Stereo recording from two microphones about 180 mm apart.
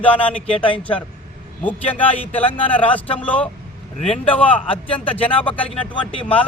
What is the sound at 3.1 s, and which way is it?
Speech, 10° left (ahead or behind).